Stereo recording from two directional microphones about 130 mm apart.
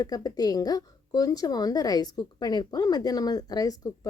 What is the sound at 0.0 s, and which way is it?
Speech, 30° left (ahead or behind).